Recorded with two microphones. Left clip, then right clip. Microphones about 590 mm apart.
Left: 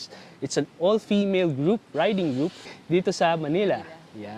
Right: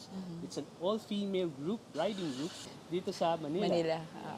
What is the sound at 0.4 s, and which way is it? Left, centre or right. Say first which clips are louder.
Speech: left 13 dB; left.